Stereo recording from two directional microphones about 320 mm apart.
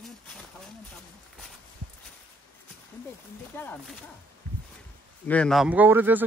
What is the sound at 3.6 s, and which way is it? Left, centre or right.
Speech, centre.